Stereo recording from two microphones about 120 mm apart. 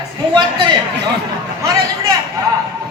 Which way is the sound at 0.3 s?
35° right (ahead or behind).